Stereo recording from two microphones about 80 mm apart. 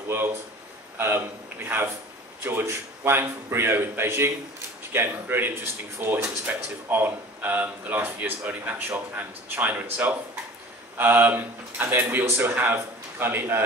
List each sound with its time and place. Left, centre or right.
0.9 s a man's voice: right